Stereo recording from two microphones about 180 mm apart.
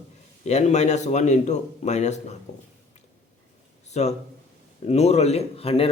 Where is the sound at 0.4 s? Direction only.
40° left (ahead or behind).